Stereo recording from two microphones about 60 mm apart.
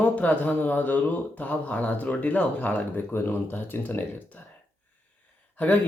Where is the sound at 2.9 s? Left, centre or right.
Left.